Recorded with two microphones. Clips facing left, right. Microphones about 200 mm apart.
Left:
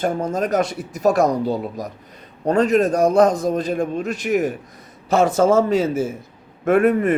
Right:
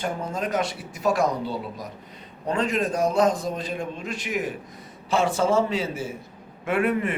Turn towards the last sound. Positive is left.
turn(degrees=45)  # may be behind; listen again after turning